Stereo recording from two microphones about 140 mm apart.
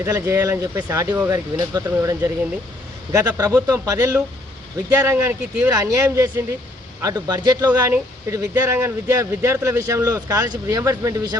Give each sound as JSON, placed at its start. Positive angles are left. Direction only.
{"t": 0.0, "sound": "speech", "side_deg": -20}